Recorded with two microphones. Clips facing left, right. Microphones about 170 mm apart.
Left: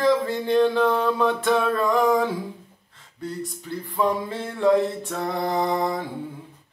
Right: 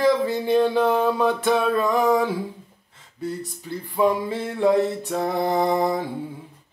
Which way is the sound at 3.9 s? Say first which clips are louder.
Right 3 dB; 10° right (ahead or behind).